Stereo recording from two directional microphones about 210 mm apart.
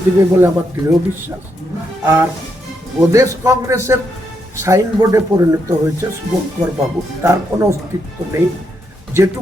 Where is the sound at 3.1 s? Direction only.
15° right (ahead or behind).